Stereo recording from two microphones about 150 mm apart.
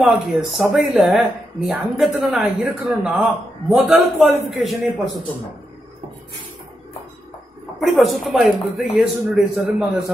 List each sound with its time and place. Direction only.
0.0 s speech: centre (ahead or behind)
7.8 s speech: centre (ahead or behind)